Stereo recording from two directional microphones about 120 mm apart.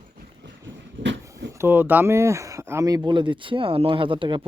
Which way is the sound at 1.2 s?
25° right (ahead or behind).